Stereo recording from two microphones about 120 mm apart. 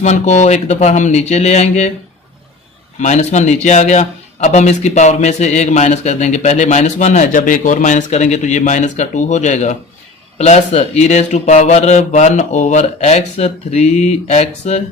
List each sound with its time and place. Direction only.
0.0 s a man's voice: 75° left (ahead or behind)
3.0 s a man's voice: 70° left (ahead or behind)